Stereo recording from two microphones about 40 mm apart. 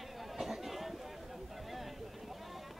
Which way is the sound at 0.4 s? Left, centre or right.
Centre.